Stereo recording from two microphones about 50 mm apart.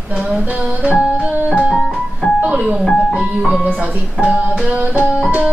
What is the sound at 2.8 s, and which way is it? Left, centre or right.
Speech, centre.